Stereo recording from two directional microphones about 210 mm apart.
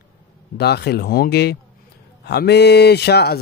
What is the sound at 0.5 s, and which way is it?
Speech, 50° left (ahead or behind).